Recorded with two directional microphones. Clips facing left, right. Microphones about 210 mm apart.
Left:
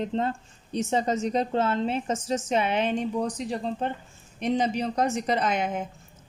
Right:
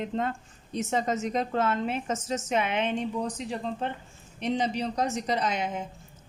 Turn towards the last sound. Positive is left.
turn(degrees=55)  # may be behind; listen again after turning